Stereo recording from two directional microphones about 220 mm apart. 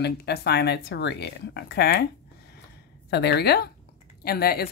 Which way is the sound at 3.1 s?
50° left (ahead or behind).